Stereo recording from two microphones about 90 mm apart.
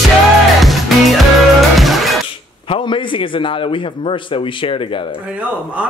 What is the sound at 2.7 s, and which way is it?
A man's voice, 65° left (ahead or behind).